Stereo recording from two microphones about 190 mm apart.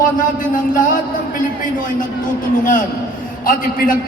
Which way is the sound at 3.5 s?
45° left (ahead or behind).